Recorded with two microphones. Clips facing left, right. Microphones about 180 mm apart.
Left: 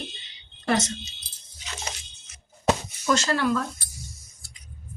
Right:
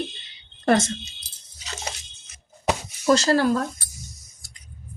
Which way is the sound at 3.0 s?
35° right (ahead or behind).